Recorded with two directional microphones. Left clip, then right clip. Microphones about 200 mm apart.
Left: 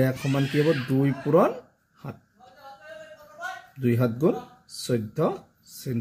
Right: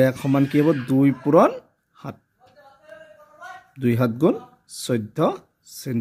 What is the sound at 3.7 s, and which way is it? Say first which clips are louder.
Speech: right 4 dB; 55° right (ahead or behind).